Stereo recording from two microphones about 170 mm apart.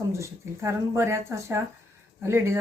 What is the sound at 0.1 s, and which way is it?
Speech, 15° right (ahead or behind).